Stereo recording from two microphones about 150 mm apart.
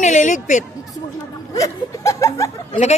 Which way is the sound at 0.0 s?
55° left (ahead or behind).